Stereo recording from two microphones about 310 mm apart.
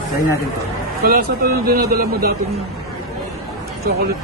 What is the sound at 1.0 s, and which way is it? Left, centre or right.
Speech, right.